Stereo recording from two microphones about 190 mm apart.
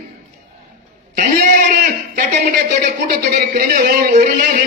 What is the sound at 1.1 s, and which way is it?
A man's voice, 45° right (ahead or behind).